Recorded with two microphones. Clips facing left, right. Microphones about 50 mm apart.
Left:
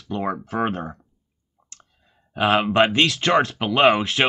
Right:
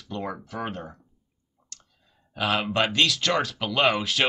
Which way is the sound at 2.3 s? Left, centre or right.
Left.